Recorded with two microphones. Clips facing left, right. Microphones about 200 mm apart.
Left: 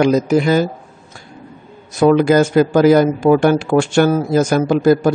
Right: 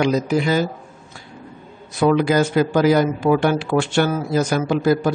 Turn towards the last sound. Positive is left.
turn(degrees=45)  # may be behind; listen again after turning